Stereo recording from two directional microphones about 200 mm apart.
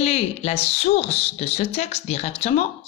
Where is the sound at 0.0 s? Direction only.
35° left (ahead or behind).